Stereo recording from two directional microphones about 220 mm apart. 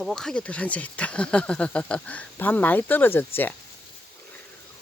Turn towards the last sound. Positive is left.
turn(degrees=10)  # may be behind; listen again after turning